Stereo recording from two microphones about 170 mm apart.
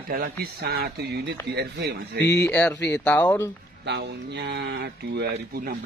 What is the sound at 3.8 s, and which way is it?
Speech, 85° right.